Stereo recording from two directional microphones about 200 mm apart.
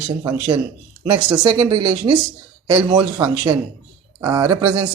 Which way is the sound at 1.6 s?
30° right (ahead or behind).